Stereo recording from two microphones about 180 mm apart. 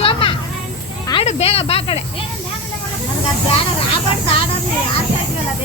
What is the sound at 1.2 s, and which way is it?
Snake, 35° left (ahead or behind).